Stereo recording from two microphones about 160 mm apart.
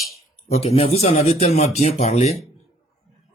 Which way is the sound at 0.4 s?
40° left (ahead or behind).